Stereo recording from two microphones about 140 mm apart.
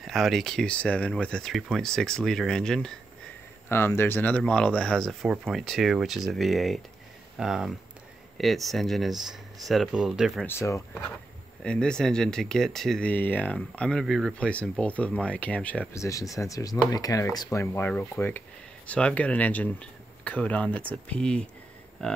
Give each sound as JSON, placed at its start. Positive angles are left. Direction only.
{"t": 0.0, "sound": "speech", "side_deg": 0}
{"t": 3.6, "sound": "speech", "side_deg": 15}
{"t": 10.4, "sound": "speech", "side_deg": 20}
{"t": 11.6, "sound": "speech", "side_deg": 5}
{"t": 15.9, "sound": "speech", "side_deg": 20}